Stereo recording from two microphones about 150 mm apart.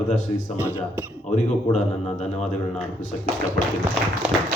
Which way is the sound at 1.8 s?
45° left (ahead or behind).